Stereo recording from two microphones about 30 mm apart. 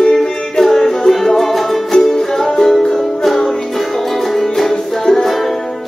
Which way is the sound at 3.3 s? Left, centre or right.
Centre.